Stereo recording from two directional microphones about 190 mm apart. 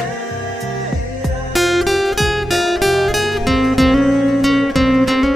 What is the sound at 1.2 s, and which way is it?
Music, centre (ahead or behind).